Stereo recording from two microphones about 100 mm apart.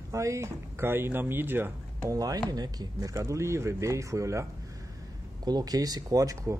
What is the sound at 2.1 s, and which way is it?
Speech, 35° right (ahead or behind).